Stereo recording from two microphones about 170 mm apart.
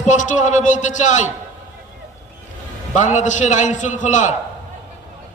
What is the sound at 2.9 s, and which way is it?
A man's voice, 45° left (ahead or behind).